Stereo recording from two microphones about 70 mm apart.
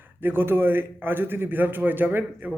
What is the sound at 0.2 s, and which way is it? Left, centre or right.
A man's voice, right.